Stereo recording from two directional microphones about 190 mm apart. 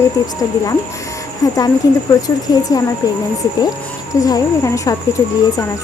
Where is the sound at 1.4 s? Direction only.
15° left (ahead or behind).